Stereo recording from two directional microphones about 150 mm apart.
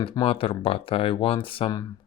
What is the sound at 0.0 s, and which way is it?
Speech, 35° left (ahead or behind).